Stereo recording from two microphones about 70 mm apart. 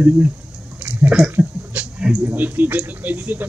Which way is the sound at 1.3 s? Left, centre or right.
Right.